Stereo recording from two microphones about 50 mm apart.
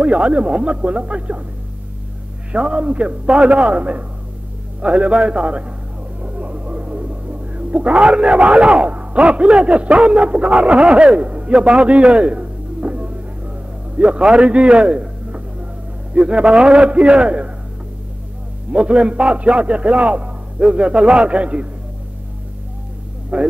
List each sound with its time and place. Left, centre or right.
0.0 s a man's voice: right
2.5 s a man's voice: right
6.2 s music: right
13.9 s a man's voice: right
18.7 s a man's voice: right
23.3 s a man's voice: right